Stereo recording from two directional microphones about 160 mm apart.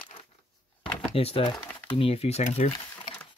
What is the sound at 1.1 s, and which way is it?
Speech, 35° left (ahead or behind).